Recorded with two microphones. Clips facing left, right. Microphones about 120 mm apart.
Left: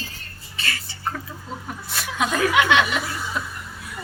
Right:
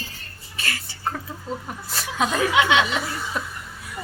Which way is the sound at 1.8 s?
35° right (ahead or behind).